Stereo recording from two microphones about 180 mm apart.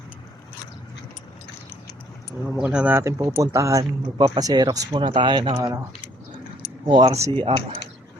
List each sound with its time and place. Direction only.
2.6 s speech: 5° right (ahead or behind); by 5.7 s 25° right (ahead or behind)
6.8 s speech: 30° right (ahead or behind)